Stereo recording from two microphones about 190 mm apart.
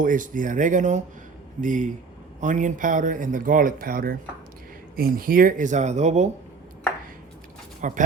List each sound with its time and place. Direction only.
0.0 s speech: 45° right (ahead or behind)
7.8 s speech: 40° right (ahead or behind)